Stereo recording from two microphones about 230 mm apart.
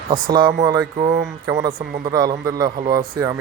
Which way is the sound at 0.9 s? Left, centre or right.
Right.